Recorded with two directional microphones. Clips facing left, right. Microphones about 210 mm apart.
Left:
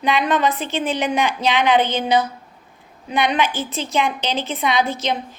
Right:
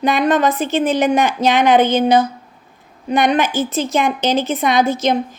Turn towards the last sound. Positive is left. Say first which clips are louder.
# right 5 dB
turn(degrees=-45)  # may be behind; listen again after turning